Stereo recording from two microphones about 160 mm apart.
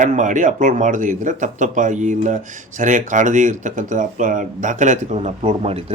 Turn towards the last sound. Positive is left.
turn(degrees=-40)  # may be behind; listen again after turning